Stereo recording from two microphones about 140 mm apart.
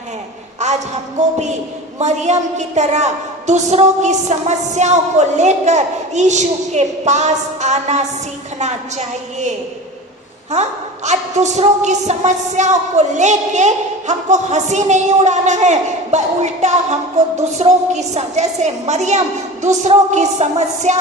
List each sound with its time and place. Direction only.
0.6 s a sound: 55° right (ahead or behind)
1.2 s a woman's voice: 55° right (ahead or behind)
10.5 s a woman's voice: 55° right (ahead or behind)